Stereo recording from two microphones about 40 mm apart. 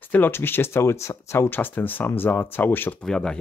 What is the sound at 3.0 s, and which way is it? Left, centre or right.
Speech, centre.